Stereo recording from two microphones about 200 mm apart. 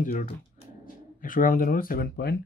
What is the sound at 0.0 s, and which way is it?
Speech, 40° left (ahead or behind).